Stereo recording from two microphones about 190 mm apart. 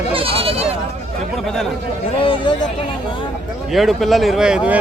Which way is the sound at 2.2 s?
30° left (ahead or behind).